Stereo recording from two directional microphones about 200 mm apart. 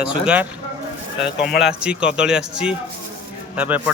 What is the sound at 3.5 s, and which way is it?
Speech, 5° right (ahead or behind).